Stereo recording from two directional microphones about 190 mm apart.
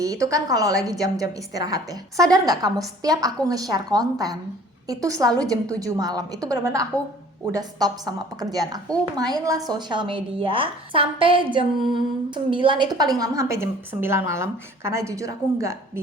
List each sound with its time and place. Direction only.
0.0 s a woman's voice: 20° right (ahead or behind)